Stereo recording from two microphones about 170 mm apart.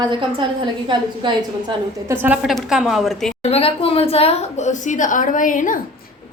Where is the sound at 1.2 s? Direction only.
30° right (ahead or behind).